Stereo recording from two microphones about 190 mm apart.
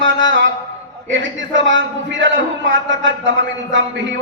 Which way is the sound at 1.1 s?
75° right (ahead or behind).